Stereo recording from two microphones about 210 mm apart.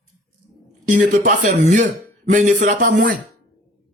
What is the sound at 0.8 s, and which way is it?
A man's voice, 35° right (ahead or behind).